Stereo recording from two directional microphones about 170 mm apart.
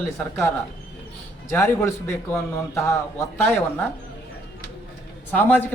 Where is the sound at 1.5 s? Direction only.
15° left (ahead or behind).